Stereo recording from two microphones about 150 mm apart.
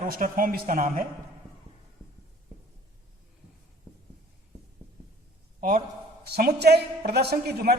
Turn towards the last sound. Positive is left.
turn(degrees=-90)